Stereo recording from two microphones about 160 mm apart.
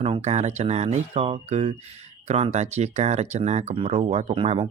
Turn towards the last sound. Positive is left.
turn(degrees=-35)  # may be behind; listen again after turning